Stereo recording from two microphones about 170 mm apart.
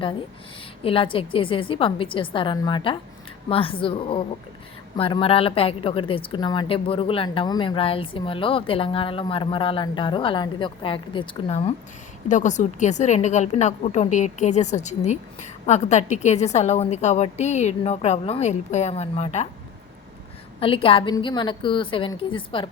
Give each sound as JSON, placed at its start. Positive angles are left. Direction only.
{"t": 0.9, "sound": "a woman's voice", "side_deg": 30}
{"t": 12.3, "sound": "a woman's voice", "side_deg": 45}
{"t": 20.6, "sound": "a woman's voice", "side_deg": 30}